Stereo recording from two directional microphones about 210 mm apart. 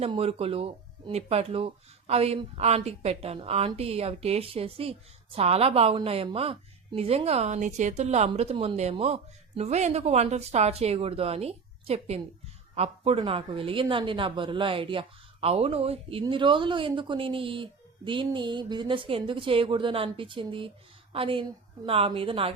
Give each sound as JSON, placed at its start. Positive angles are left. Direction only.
{"t": 0.0, "sound": "speech", "side_deg": -30}